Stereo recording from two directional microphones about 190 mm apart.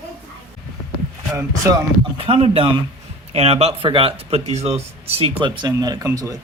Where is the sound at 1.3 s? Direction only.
15° right (ahead or behind).